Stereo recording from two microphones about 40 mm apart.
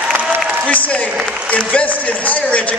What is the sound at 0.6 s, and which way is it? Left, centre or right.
A man's voice, left.